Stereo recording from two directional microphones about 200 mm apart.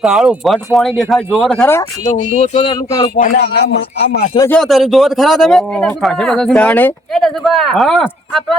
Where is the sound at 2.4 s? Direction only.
30° left (ahead or behind).